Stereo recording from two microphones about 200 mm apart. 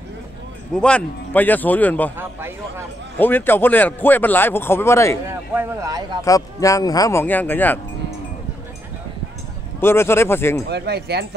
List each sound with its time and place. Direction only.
0.7 s speech: 5° left (ahead or behind)
3.2 s speech: 10° left (ahead or behind)
5.5 s speech: 15° right (ahead or behind)
6.2 s speech: 15° left (ahead or behind)
9.8 s speech: 10° left (ahead or behind)
10.7 s speech: 55° right (ahead or behind)